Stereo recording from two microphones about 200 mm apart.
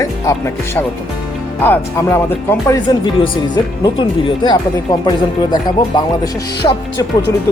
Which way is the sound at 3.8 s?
25° left (ahead or behind).